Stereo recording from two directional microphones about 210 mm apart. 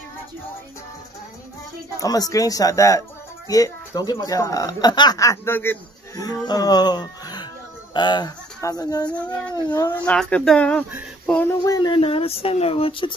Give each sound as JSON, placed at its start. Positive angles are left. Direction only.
{"t": 2.0, "sound": "speech", "side_deg": 15}
{"t": 9.9, "sound": "speech", "side_deg": 5}